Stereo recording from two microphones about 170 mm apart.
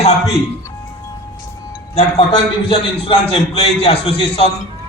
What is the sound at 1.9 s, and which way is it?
A man's voice, 40° left (ahead or behind).